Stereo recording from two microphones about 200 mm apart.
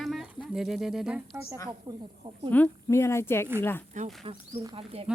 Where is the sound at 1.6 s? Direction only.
25° right (ahead or behind).